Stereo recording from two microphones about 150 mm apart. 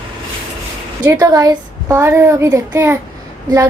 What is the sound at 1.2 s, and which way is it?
A child's voice, 20° right (ahead or behind).